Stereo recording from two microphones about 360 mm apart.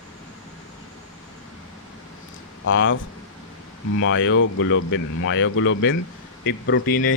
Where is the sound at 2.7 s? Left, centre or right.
Left.